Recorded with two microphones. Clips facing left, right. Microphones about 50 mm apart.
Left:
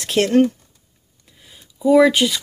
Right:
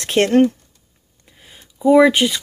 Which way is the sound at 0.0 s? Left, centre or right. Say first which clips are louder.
Right 2 dB; right.